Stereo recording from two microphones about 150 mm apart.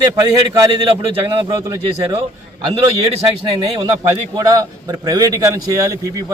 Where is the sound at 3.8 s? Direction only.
25° right (ahead or behind).